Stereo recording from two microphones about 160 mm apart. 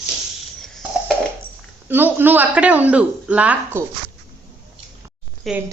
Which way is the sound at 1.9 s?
10° right (ahead or behind).